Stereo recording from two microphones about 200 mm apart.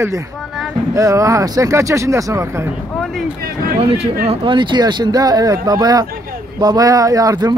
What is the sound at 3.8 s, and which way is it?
Speech, 30° right (ahead or behind).